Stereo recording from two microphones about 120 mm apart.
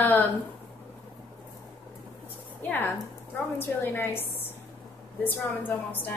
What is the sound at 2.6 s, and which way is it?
A woman's voice, 15° left (ahead or behind).